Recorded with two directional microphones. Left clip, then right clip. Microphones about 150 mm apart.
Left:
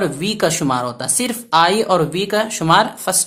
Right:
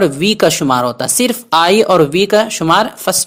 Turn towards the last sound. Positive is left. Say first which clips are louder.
# right 2 dB
turn(degrees=-35)  # may be behind; listen again after turning